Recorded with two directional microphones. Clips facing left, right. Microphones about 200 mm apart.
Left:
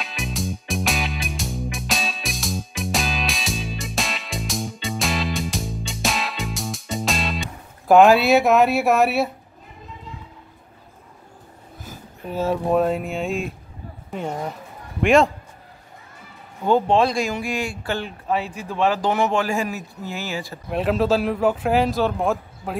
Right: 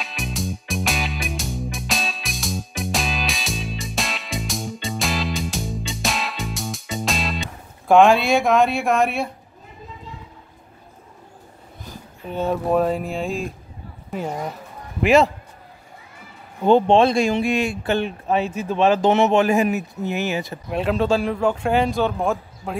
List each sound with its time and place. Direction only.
0.0 s music: centre (ahead or behind)
7.9 s speech: 5° left (ahead or behind)
11.8 s speech: 5° left (ahead or behind)
16.6 s speech: 25° right (ahead or behind)
20.7 s speech: centre (ahead or behind)